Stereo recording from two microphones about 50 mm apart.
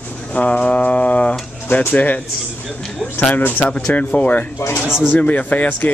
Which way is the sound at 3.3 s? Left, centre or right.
Left.